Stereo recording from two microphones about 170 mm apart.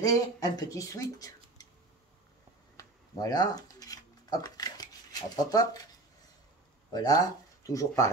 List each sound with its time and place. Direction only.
0.0 s speech: 20° left (ahead or behind)
2.8 s a sound: 20° left (ahead or behind)
3.8 s dishes: 20° left (ahead or behind)
5.3 s speech: 20° left (ahead or behind)
6.9 s speech: 25° left (ahead or behind)